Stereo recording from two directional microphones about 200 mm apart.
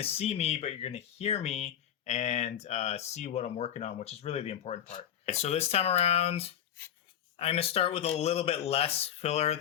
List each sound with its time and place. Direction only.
0.0 s speech: 30° left (ahead or behind)